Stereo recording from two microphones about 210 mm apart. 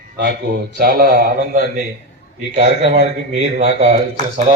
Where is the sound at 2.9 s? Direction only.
35° right (ahead or behind).